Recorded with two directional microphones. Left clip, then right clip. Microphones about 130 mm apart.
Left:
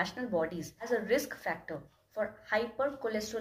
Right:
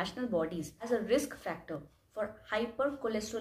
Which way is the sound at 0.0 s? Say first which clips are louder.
Left 1 dB; 10° right (ahead or behind).